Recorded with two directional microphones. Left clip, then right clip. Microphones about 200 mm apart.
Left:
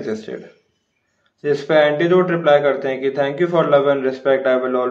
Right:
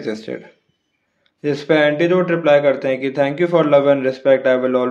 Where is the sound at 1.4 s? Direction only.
40° right (ahead or behind).